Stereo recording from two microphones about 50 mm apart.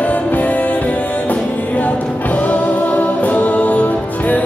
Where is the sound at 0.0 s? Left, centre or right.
Left.